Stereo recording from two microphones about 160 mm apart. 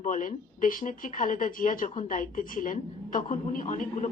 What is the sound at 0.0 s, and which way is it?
A woman's voice, 55° left (ahead or behind).